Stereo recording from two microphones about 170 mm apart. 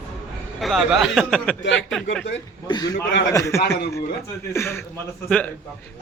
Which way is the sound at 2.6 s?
25° left (ahead or behind).